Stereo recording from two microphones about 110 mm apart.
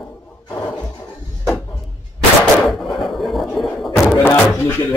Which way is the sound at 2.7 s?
Centre (ahead or behind).